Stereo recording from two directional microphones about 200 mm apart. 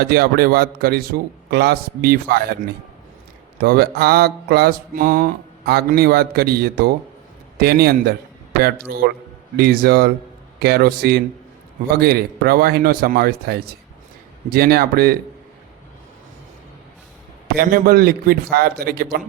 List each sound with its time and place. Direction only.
0.0 s mantra: 50° right (ahead or behind)
17.5 s mantra: 50° right (ahead or behind)